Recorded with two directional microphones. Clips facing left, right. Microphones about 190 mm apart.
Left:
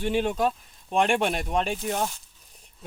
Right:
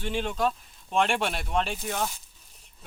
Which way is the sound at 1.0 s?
45° left (ahead or behind).